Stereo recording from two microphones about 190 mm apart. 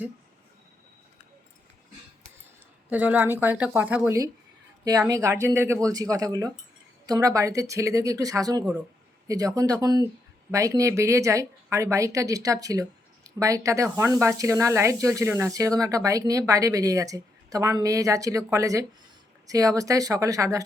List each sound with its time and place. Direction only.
2.9 s speech: 10° right (ahead or behind)
4.9 s speech: 20° right (ahead or behind)